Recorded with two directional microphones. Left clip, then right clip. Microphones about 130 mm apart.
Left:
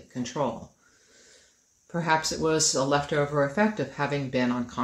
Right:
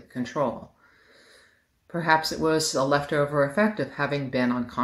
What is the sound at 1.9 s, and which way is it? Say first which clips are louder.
Speech: right 3 dB; 10° left (ahead or behind).